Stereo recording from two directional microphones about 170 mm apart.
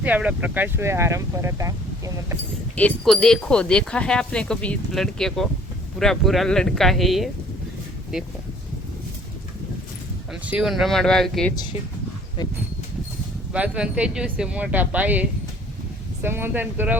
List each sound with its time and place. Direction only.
0.0 s speech: 10° right (ahead or behind)
2.7 s speech: 5° left (ahead or behind)
10.4 s speech: 5° right (ahead or behind)
12.4 s speech: 25° left (ahead or behind)
13.5 s speech: 5° right (ahead or behind)